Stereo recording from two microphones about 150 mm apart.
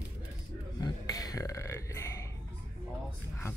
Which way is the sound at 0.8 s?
25° left (ahead or behind).